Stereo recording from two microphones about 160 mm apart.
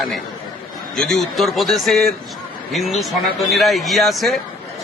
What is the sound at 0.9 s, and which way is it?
A man's voice, 5° left (ahead or behind).